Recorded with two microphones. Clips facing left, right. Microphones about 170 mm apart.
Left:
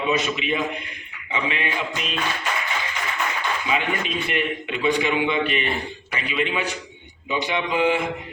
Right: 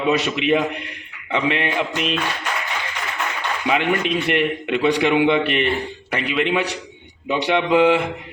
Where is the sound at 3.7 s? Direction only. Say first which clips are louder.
Right 8 dB; 65° right (ahead or behind).